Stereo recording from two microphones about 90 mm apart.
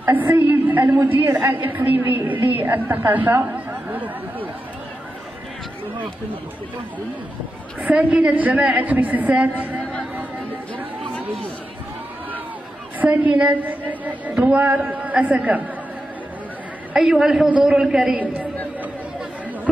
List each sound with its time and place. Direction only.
0.0 s a woman's voice: 20° right (ahead or behind)
7.8 s a woman's voice: 15° right (ahead or behind)
13.0 s a woman's voice: 15° right (ahead or behind)
16.9 s a man's voice: 5° right (ahead or behind)
18.2 s a woman's voice: 15° right (ahead or behind)